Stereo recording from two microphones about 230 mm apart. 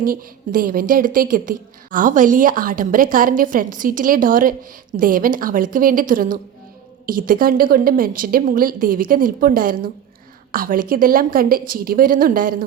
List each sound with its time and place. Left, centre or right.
0.0 s a woman's voice: right